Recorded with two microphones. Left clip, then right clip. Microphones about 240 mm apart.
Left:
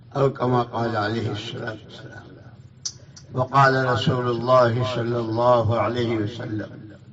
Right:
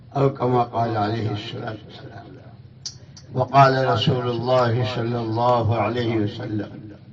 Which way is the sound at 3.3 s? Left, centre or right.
Left.